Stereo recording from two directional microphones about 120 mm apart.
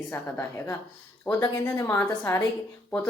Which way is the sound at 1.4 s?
25° left (ahead or behind).